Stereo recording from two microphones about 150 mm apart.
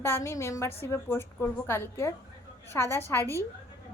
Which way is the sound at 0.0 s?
15° left (ahead or behind).